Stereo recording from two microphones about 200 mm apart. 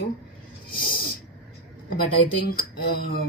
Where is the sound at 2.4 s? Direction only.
50° left (ahead or behind).